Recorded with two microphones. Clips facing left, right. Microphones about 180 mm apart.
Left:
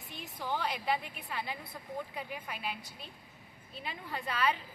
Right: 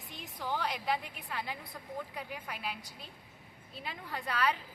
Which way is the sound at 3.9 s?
15° left (ahead or behind).